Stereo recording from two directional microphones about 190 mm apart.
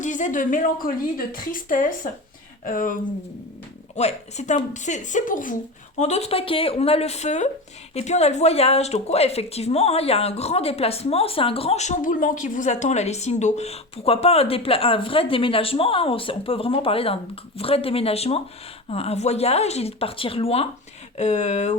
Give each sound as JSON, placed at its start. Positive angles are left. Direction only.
{"t": 0.0, "sound": "speech", "side_deg": 40}
{"t": 3.9, "sound": "speech", "side_deg": 35}